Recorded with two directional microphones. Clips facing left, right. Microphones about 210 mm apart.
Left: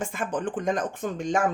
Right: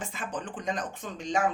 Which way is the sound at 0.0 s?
50° left (ahead or behind).